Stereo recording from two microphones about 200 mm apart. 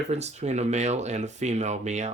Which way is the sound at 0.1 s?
35° right (ahead or behind).